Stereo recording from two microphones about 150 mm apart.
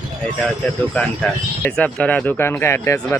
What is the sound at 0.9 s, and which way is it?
Speech, 10° left (ahead or behind).